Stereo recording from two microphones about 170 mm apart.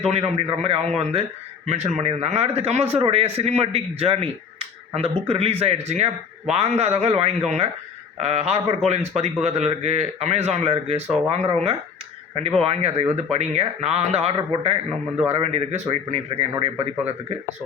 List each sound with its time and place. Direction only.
0.0 s speech: 35° right (ahead or behind)